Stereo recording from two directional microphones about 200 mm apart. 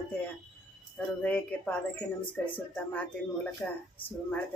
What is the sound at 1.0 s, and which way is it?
Speech, 10° left (ahead or behind).